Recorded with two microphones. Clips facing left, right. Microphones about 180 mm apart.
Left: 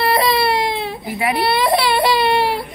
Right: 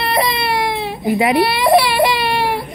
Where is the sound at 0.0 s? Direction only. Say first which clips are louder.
Left 2 dB; 20° right (ahead or behind).